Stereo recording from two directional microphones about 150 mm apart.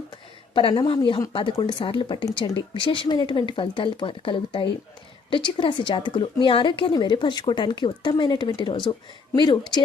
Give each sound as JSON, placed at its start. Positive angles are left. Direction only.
{"t": 0.5, "sound": "a woman's voice", "side_deg": 35}